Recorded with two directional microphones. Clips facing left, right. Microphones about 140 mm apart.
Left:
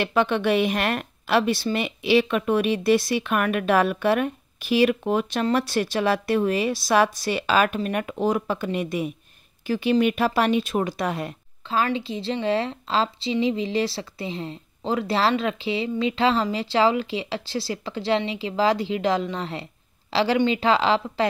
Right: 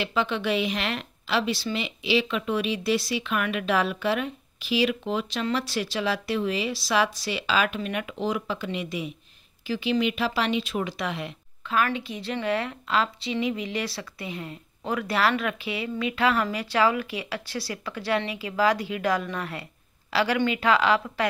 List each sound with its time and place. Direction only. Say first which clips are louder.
0.0 s a woman's voice: left 5 dB; 55° left (ahead or behind)
11.6 s a woman's voice: left 2 dB; 30° left (ahead or behind)